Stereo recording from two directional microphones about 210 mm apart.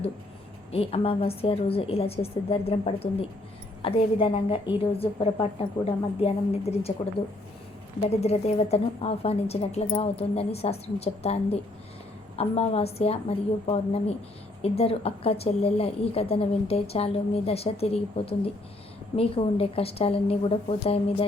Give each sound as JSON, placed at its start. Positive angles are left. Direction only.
{"t": 0.7, "sound": "a woman's voice", "side_deg": 30}
{"t": 7.9, "sound": "a woman's voice", "side_deg": 30}